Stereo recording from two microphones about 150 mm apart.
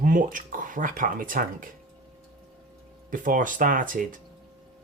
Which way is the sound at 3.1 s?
65° right (ahead or behind).